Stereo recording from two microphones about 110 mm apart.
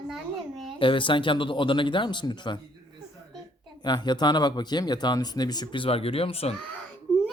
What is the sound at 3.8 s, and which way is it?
Speech, 40° left (ahead or behind).